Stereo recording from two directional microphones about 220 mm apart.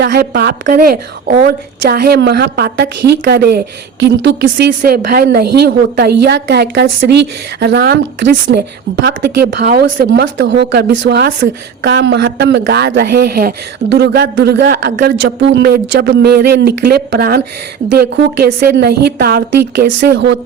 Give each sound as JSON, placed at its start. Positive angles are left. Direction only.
{"t": 0.0, "sound": "a woman's voice", "side_deg": -45}